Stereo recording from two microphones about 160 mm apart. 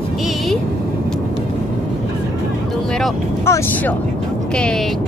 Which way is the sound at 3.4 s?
15° left (ahead or behind).